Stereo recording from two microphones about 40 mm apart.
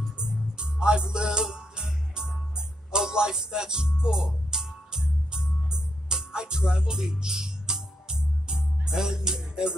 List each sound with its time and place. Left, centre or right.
0.2 s music: right